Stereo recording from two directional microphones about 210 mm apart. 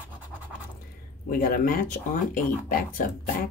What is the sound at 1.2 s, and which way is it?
Speech, 45° left (ahead or behind).